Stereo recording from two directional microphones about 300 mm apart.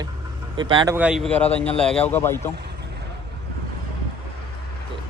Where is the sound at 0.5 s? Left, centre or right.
Centre.